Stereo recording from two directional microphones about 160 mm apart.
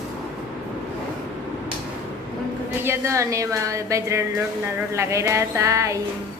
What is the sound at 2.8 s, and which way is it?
A woman's voice, 20° right (ahead or behind).